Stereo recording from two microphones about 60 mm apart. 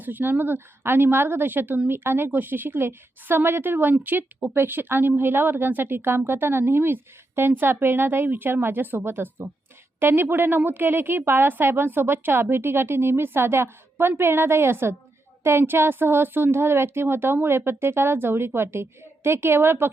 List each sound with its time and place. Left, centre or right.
0.0 s a woman's voice: right